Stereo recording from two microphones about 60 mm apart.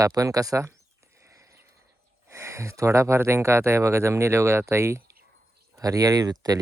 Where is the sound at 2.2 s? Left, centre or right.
Right.